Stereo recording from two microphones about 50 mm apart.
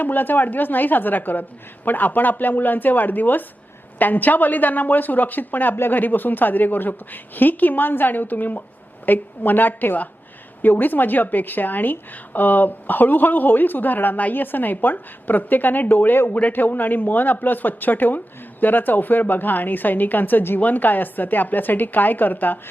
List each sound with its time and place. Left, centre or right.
0.0 s a woman's voice: left